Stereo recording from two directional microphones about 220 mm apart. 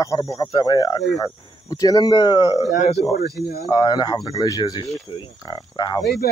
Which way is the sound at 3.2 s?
45° left (ahead or behind).